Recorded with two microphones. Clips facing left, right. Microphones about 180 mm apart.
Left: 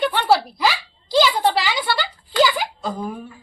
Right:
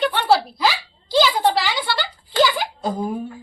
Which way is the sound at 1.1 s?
Centre (ahead or behind).